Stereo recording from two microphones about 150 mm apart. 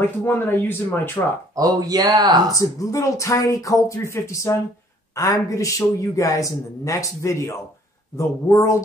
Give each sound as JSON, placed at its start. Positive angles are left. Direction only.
{"t": 0.0, "sound": "speech", "side_deg": 15}
{"t": 1.6, "sound": "speech", "side_deg": -25}
{"t": 2.5, "sound": "a man's voice", "side_deg": 20}